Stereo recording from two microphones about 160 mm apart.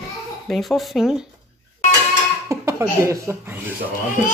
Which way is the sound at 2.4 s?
20° right (ahead or behind).